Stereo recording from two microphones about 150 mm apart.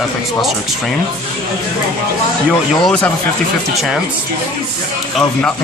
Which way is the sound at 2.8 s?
10° left (ahead or behind).